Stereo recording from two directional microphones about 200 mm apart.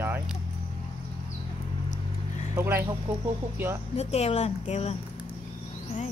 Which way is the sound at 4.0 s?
30° left (ahead or behind).